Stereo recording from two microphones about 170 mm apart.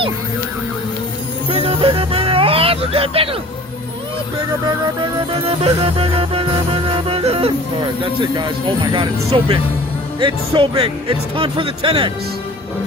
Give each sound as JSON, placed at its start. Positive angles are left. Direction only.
{"t": 1.5, "sound": "music", "side_deg": -30}
{"t": 5.3, "sound": "music", "side_deg": -35}
{"t": 8.2, "sound": "speech", "side_deg": -30}